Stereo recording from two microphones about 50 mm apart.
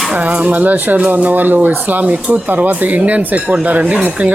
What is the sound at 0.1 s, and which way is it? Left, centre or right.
Speech, right.